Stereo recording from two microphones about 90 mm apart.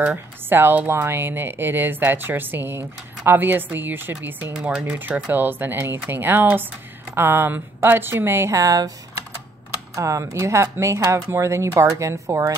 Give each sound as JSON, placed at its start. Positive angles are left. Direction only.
{"t": 0.0, "sound": "speech", "side_deg": -20}
{"t": 8.5, "sound": "speech", "side_deg": -40}